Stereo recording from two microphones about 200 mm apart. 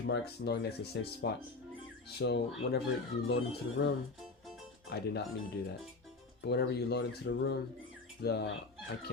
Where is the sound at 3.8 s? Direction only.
55° left (ahead or behind).